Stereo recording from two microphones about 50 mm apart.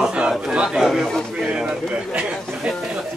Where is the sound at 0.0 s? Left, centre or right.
Centre.